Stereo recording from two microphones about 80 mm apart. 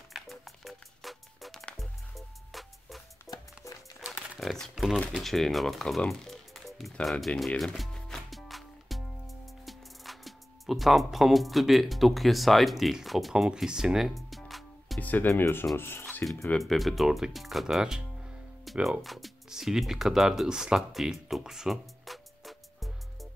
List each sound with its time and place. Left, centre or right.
0.1 s music: centre
3.3 s music: left
4.1 s a sound: centre
5.2 s music: centre
15.0 s speech: left
15.2 s speech: left
16.5 s speech: centre